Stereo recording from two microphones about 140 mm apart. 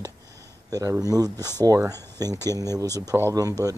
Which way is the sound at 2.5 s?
25° right (ahead or behind).